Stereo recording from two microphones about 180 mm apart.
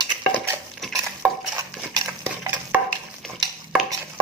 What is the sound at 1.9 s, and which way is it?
Stir, 15° right (ahead or behind).